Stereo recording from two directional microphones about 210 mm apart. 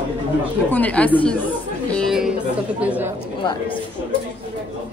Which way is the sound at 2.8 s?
5° right (ahead or behind).